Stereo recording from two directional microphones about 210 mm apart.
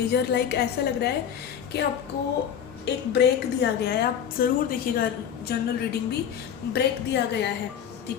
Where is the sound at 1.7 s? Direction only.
55° left (ahead or behind).